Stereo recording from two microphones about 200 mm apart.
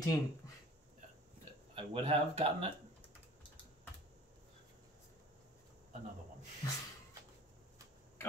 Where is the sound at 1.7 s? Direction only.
30° right (ahead or behind).